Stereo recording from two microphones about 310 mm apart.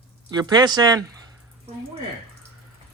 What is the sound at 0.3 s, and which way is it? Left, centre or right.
Speech, centre.